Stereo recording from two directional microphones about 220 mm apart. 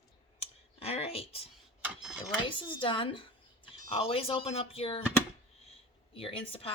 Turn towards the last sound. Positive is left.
turn(degrees=25)  # may be behind; listen again after turning